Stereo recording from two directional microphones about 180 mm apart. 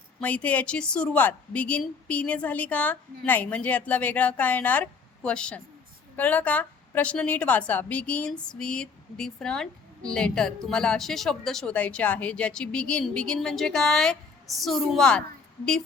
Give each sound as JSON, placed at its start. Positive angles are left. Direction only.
{"t": 0.2, "sound": "a woman's voice", "side_deg": 10}